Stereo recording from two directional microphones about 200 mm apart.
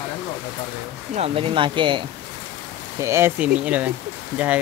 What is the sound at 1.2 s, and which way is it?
Speech, 25° right (ahead or behind).